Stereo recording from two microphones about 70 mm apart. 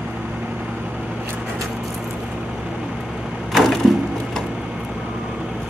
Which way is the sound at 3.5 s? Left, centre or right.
Centre.